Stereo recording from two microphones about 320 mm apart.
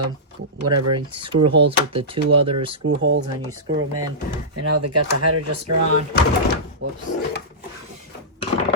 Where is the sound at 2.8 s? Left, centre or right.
Right.